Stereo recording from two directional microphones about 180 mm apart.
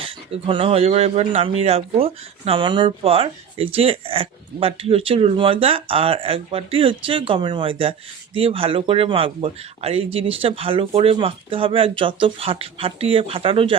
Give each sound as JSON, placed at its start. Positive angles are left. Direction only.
{"t": 0.0, "sound": "speech", "side_deg": -30}